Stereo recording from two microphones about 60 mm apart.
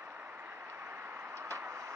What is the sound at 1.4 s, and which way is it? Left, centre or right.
Vehicle, right.